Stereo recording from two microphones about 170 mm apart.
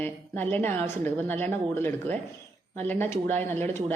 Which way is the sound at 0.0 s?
10° left (ahead or behind).